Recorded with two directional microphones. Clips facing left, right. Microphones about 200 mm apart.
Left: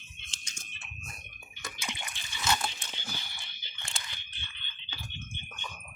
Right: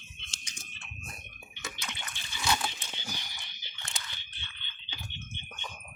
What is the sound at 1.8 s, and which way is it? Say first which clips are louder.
Bathtub: left 2 dB; 15° left (ahead or behind).